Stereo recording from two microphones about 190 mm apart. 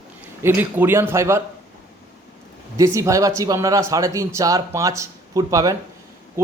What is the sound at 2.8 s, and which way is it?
A man's voice, 15° right (ahead or behind).